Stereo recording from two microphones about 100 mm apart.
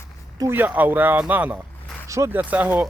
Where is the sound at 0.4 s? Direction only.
20° right (ahead or behind).